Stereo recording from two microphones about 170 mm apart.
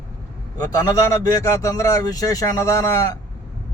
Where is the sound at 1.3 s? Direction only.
20° left (ahead or behind).